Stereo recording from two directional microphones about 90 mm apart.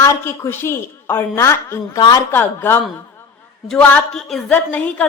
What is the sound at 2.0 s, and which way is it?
Speech, 50° left (ahead or behind).